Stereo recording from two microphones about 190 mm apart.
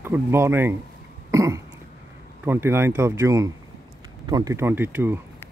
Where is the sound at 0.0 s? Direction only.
10° right (ahead or behind).